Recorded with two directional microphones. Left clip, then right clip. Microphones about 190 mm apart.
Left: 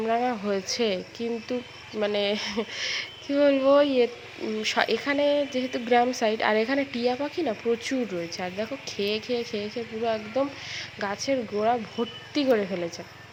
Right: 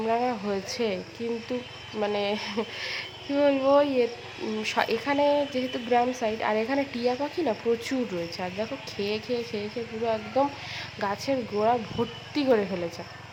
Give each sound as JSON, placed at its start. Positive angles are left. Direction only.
{"t": 0.0, "sound": "speech", "side_deg": 20}
{"t": 2.0, "sound": "speech", "side_deg": 20}